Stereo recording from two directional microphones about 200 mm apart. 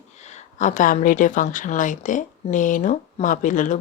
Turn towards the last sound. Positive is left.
turn(degrees=40)  # may be behind; listen again after turning